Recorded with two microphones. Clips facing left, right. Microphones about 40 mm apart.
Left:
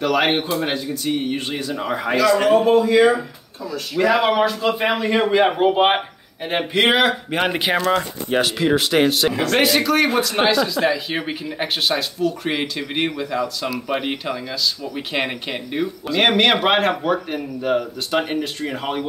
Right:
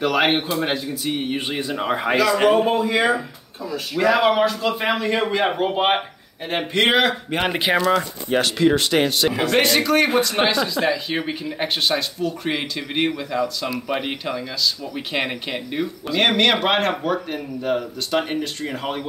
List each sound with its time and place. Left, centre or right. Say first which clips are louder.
0.0 s speech: left 1 dB; centre
1.6 s speech: right 1 dB; right
2.5 s a man's voice: left 4 dB; centre
4.0 s speech: even; centre
8.3 s speech: right 1 dB; centre
9.3 s a man's voice: even; centre
9.6 s speech: even; centre